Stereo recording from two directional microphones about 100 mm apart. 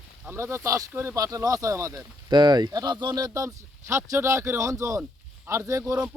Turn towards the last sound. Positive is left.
turn(degrees=-30)  # may be behind; listen again after turning